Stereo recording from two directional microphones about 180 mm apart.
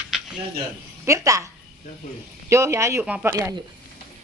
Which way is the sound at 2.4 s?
15° right (ahead or behind).